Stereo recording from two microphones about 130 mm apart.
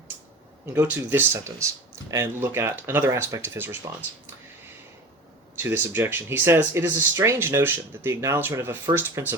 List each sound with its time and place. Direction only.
0.7 s speech: 20° right (ahead or behind)
5.5 s speech: 15° right (ahead or behind)